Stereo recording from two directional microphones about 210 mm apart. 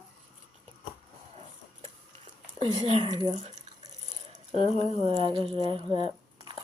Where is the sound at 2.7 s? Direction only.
30° right (ahead or behind).